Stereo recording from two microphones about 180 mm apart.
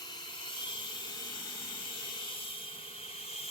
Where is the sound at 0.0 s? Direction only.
25° left (ahead or behind).